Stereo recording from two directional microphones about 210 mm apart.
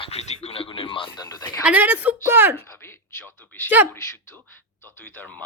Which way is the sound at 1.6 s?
10° right (ahead or behind).